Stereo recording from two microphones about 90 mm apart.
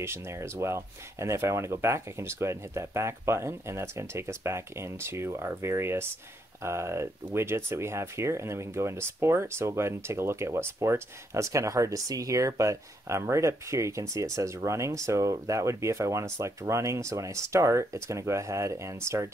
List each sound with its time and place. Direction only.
0.0 s speech: 30° right (ahead or behind)